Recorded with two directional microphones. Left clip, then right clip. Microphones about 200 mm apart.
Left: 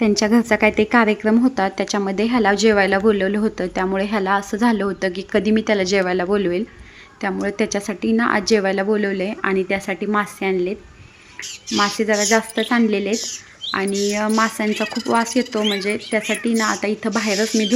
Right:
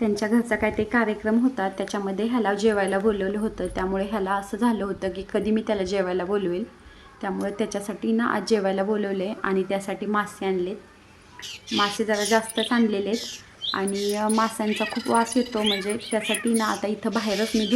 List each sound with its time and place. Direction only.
0.0 s a woman's voice: 20° left (ahead or behind)
11.9 s a woman's voice: 15° left (ahead or behind)
15.0 s speech: 40° left (ahead or behind)
15.3 s a woman's voice: 10° left (ahead or behind)
16.2 s speech: 30° left (ahead or behind)
16.5 s a woman's voice: 15° left (ahead or behind)